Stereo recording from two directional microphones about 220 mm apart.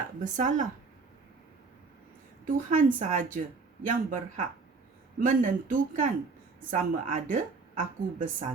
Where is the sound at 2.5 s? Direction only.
40° right (ahead or behind).